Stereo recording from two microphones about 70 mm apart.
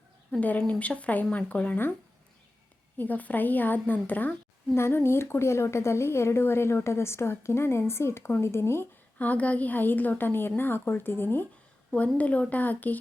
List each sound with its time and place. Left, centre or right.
0.3 s a woman's voice: left
3.0 s a woman's voice: left
9.1 s a woman's voice: left
11.9 s a woman's voice: centre